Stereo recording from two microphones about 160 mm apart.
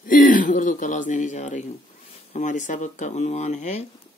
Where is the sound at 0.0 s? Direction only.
60° left (ahead or behind).